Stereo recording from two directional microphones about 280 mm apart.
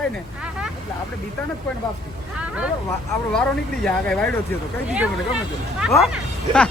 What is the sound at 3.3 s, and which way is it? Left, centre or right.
Speech, centre.